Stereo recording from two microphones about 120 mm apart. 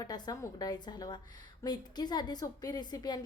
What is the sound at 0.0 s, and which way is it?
A woman's voice, 30° left (ahead or behind).